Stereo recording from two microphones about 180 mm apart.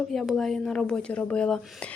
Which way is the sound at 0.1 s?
Centre (ahead or behind).